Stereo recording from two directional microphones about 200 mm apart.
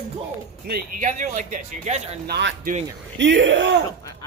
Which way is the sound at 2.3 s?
55° right (ahead or behind).